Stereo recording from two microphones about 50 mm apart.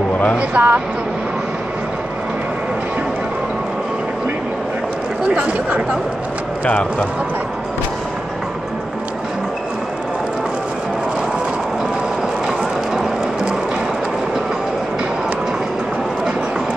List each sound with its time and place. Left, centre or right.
0.4 s speech: right
6.6 s speech: left